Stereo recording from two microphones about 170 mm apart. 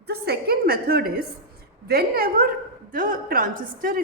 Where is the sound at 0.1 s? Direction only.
70° right (ahead or behind).